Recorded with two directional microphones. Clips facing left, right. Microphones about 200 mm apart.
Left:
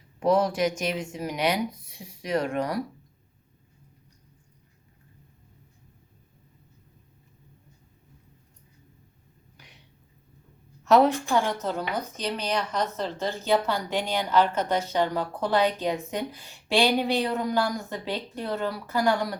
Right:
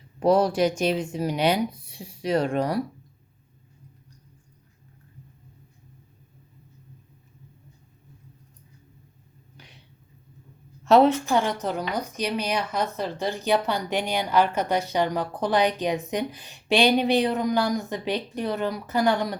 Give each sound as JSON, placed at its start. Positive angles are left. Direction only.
{"t": 0.2, "sound": "speech", "side_deg": -35}
{"t": 10.8, "sound": "a woman's voice", "side_deg": -25}